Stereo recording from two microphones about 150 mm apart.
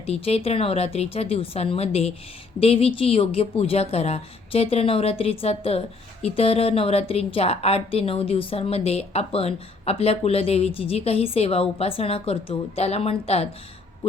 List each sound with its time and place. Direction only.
0.0 s a woman's voice: 45° left (ahead or behind)
14.0 s owl: 40° left (ahead or behind)